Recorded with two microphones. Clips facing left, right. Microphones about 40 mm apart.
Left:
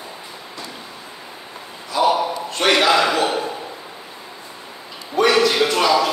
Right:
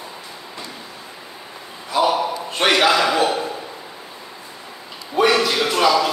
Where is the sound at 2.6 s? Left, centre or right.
Right.